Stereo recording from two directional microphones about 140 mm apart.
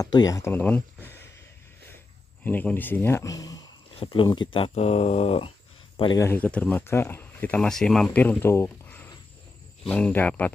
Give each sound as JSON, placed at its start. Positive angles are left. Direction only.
{"t": 0.0, "sound": "speech", "side_deg": 25}
{"t": 2.4, "sound": "speech", "side_deg": 10}
{"t": 4.0, "sound": "speech", "side_deg": 40}
{"t": 6.1, "sound": "speech", "side_deg": 15}